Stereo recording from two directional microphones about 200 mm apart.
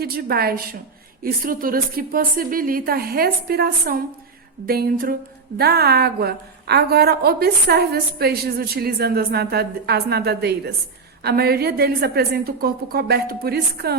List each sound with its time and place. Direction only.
0.0 s a woman's voice: 50° right (ahead or behind)